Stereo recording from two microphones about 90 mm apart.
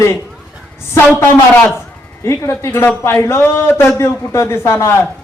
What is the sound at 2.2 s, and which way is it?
A man's voice, 30° left (ahead or behind).